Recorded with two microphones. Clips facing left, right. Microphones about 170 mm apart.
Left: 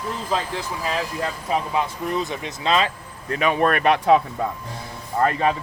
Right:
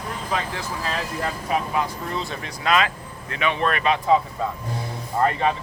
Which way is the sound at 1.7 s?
20° left (ahead or behind).